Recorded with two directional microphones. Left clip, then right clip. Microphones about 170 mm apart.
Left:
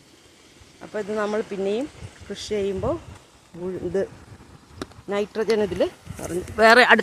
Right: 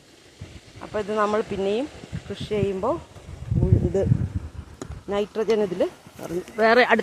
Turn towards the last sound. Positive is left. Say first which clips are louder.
# left 4 dB
turn(degrees=15)  # may be behind; listen again after turning